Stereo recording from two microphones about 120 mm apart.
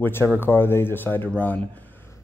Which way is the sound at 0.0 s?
20° left (ahead or behind).